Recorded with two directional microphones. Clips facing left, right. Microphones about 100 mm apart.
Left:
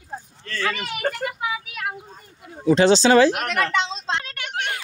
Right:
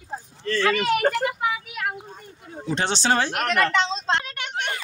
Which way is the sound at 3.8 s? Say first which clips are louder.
Right 2 dB; 45° right (ahead or behind).